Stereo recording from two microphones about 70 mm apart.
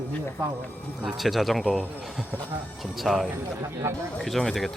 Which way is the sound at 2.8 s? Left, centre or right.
Centre.